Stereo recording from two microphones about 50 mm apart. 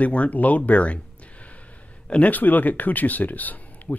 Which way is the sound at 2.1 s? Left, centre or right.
Left.